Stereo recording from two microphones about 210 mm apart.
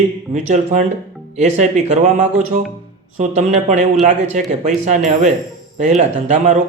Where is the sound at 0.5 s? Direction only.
35° right (ahead or behind).